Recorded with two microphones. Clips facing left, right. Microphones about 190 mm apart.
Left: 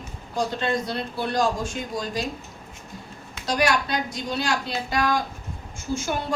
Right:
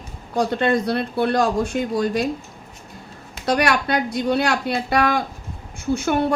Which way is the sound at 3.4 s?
60° right (ahead or behind).